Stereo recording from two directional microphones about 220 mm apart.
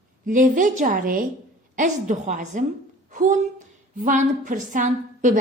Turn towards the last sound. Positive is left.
turn(degrees=-35)  # may be behind; listen again after turning